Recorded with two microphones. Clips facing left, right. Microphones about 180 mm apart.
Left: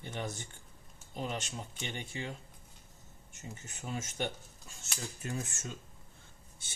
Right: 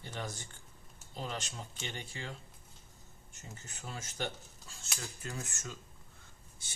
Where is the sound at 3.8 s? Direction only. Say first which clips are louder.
Left 3 dB; 20° left (ahead or behind).